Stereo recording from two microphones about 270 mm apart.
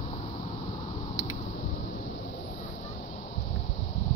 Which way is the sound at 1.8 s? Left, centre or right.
Left.